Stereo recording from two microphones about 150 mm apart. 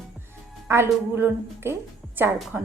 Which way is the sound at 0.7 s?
15° right (ahead or behind).